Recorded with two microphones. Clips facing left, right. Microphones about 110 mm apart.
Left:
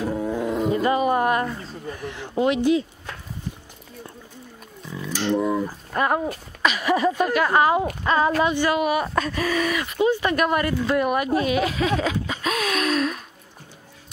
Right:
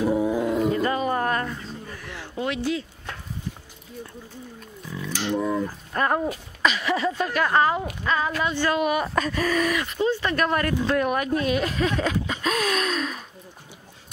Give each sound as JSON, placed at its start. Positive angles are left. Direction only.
{"t": 0.0, "sound": "roaring cats", "side_deg": -10}
{"t": 0.7, "sound": "a sound", "side_deg": 15}
{"t": 5.1, "sound": "speech", "side_deg": -5}
{"t": 5.4, "sound": "speech", "side_deg": 10}
{"t": 6.6, "sound": "a sound", "side_deg": 10}
{"t": 7.3, "sound": "speech", "side_deg": 10}
{"t": 7.8, "sound": "speech", "side_deg": 35}
{"t": 8.5, "sound": "speech", "side_deg": 10}
{"t": 9.9, "sound": "speech", "side_deg": 15}